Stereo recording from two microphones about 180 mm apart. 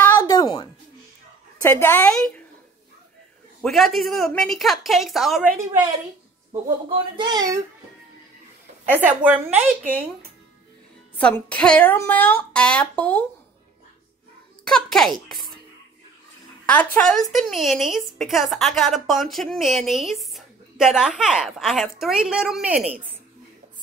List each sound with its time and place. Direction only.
0.3 s a sound: 25° left (ahead or behind)
1.6 s speech: 15° left (ahead or behind)
3.6 s a woman's voice: centre (ahead or behind)
7.2 s a child's voice: 25° right (ahead or behind)
8.9 s a woman's voice: 10° right (ahead or behind)
11.1 s speech: 5° left (ahead or behind)
14.6 s a child's voice: 5° left (ahead or behind)
16.6 s a woman's voice: 10° left (ahead or behind)